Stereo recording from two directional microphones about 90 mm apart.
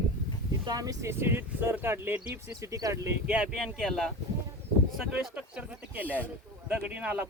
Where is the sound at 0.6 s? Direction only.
45° right (ahead or behind).